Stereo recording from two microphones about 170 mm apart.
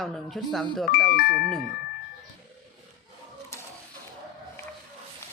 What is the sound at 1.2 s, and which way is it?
Speech, 65° left (ahead or behind).